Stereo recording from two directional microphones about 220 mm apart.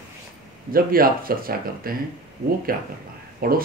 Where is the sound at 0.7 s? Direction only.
40° right (ahead or behind).